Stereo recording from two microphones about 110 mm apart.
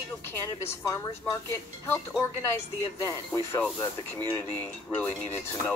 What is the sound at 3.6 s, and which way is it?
Speech, 15° left (ahead or behind).